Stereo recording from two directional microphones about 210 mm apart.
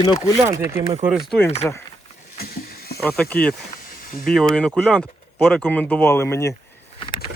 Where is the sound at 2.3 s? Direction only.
45° left (ahead or behind).